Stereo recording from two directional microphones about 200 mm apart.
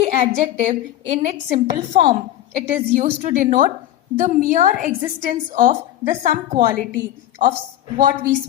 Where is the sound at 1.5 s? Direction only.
25° right (ahead or behind).